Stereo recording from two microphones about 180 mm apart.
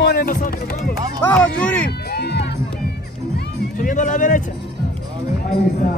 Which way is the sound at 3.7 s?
45° left (ahead or behind).